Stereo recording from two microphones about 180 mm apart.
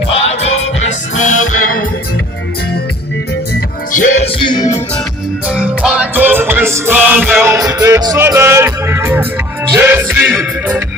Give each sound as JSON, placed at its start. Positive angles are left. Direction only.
{"t": 0.1, "sound": "music", "side_deg": 35}
{"t": 3.9, "sound": "music", "side_deg": 45}
{"t": 5.5, "sound": "music", "side_deg": -5}